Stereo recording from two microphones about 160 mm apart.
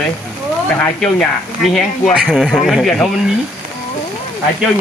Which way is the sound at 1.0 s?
5° left (ahead or behind).